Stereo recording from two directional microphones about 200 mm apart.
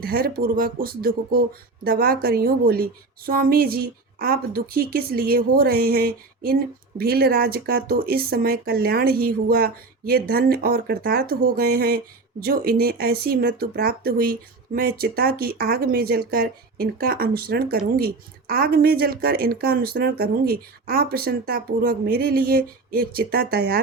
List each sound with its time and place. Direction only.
0.0 s speech: 50° right (ahead or behind)